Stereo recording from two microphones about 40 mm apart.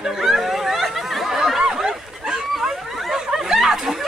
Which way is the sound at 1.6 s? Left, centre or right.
Centre.